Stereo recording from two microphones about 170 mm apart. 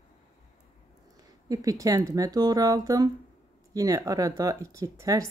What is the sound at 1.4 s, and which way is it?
Speech, 20° right (ahead or behind).